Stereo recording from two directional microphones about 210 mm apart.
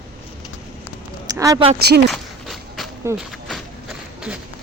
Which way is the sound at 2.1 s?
Centre (ahead or behind).